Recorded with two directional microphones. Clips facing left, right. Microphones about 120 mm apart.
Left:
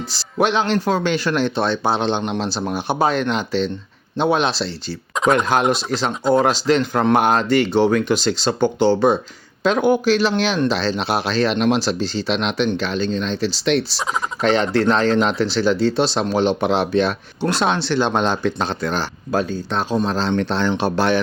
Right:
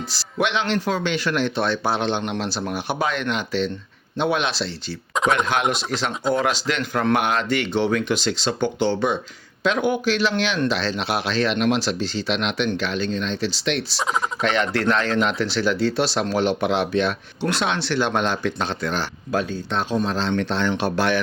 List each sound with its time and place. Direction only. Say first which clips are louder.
0.1 s speech: left 5 dB; 35° left (ahead or behind)
5.2 s turkey: left 3 dB; centre (ahead or behind)
5.7 s speech: left 4 dB; 35° left (ahead or behind)